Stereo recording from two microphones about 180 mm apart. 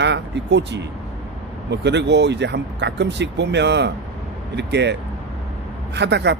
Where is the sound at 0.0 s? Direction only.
75° right (ahead or behind).